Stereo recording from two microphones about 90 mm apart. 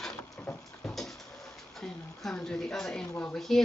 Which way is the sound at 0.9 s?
5° left (ahead or behind).